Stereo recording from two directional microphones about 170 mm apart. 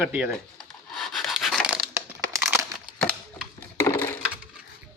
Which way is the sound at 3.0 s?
5° left (ahead or behind).